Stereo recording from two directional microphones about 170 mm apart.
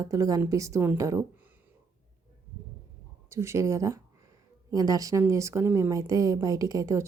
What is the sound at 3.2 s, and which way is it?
A woman's voice, 15° right (ahead or behind).